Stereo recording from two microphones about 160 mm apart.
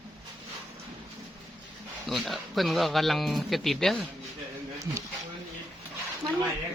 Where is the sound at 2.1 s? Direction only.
Centre (ahead or behind).